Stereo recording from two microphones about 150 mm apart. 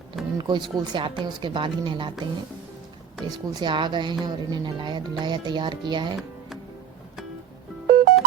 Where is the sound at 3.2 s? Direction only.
25° right (ahead or behind).